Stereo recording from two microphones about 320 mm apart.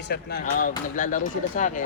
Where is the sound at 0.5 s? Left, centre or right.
Left.